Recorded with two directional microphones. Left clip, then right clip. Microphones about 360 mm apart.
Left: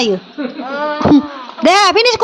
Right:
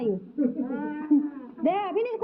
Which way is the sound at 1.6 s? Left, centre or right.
Left.